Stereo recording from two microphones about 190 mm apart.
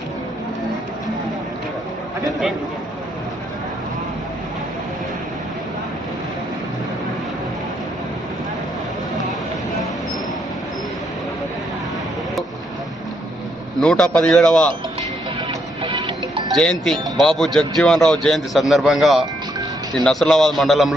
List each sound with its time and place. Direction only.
13.8 s a man's voice: 5° left (ahead or behind)
15.8 s music: 25° right (ahead or behind)
16.6 s a man's voice: centre (ahead or behind)